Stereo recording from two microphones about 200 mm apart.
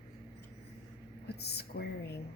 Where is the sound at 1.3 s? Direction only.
55° left (ahead or behind).